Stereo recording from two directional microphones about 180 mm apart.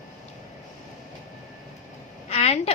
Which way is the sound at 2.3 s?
35° left (ahead or behind).